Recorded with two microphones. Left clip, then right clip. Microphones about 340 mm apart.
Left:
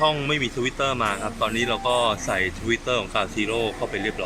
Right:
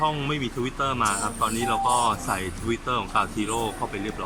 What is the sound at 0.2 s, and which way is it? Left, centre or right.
Speech, centre.